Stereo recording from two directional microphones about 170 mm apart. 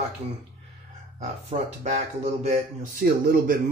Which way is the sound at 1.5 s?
40° right (ahead or behind).